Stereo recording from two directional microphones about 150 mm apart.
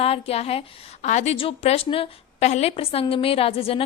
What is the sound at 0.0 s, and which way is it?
A woman's voice, 40° left (ahead or behind).